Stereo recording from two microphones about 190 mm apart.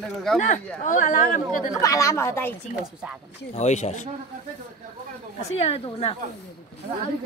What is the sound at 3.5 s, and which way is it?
Speech, 35° left (ahead or behind).